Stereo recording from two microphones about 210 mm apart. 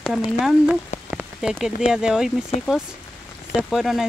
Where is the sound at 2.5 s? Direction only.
30° left (ahead or behind).